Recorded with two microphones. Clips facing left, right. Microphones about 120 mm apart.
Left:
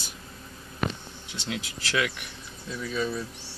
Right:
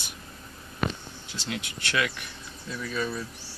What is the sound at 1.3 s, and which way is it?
Speech, 20° left (ahead or behind).